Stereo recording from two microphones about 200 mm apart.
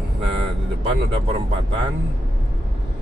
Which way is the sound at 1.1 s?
25° right (ahead or behind).